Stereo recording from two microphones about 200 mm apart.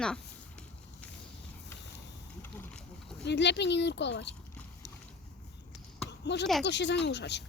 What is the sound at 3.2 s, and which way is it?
Speech, 60° left (ahead or behind).